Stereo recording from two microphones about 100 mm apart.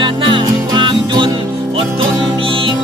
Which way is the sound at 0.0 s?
55° right (ahead or behind).